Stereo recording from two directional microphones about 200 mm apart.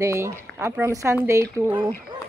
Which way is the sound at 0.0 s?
15° right (ahead or behind).